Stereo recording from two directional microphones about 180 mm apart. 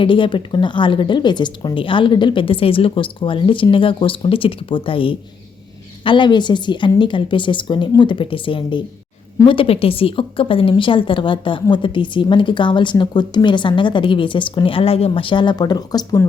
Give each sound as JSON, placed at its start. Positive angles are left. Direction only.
{"t": 0.0, "sound": "a woman's voice", "side_deg": 30}